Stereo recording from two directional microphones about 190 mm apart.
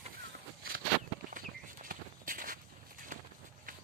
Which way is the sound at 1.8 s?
45° right (ahead or behind).